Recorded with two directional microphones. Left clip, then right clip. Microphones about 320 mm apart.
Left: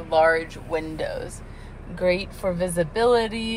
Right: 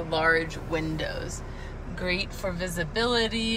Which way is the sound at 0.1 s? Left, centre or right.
Centre.